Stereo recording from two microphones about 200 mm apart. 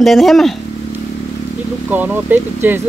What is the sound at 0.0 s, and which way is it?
Speech, centre (ahead or behind).